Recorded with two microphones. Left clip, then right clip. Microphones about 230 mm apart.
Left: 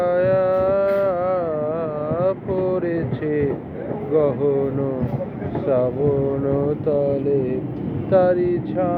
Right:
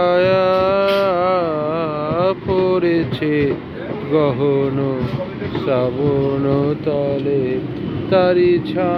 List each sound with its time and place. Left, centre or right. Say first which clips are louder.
0.0 s music: right 4 dB; right
4.1 s speech: right 2 dB; right
5.6 s speech: right 1 dB; right
6.5 s speech: right 2 dB; right
8.1 s speech: right 3 dB; right